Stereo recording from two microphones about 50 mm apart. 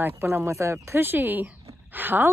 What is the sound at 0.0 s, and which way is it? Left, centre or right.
Speech, right.